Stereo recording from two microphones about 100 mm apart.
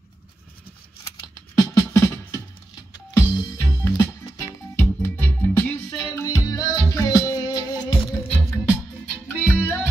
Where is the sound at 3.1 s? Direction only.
30° left (ahead or behind).